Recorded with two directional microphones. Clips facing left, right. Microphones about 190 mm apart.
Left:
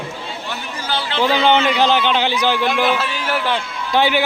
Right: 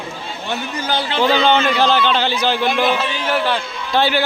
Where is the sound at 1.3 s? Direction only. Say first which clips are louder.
Even; 15° left (ahead or behind).